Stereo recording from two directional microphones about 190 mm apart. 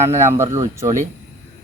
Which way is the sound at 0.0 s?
15° right (ahead or behind).